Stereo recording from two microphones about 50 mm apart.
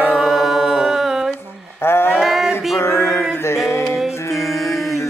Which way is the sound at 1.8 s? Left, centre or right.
Left.